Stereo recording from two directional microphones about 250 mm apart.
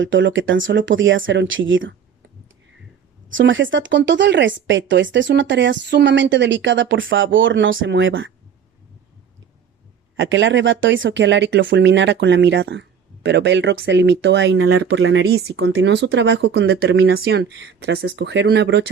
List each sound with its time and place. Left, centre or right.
0.0 s speech: right
3.2 s speech: right
10.2 s speech: right
14.6 s speech: right
14.8 s speech: right